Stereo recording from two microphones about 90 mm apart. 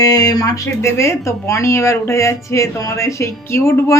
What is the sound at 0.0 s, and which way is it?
Speech, 45° left (ahead or behind).